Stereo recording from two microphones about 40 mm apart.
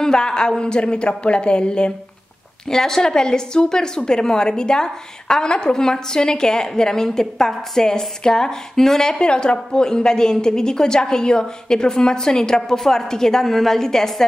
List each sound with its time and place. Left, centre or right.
0.0 s a woman's voice: centre
2.7 s a woman's voice: centre
9.2 s a woman's voice: left